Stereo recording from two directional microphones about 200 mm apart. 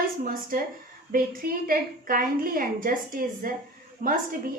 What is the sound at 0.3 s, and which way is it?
A woman's voice, 45° right (ahead or behind).